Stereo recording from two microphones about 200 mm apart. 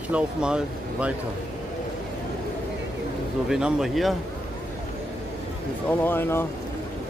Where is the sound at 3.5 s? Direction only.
Centre (ahead or behind).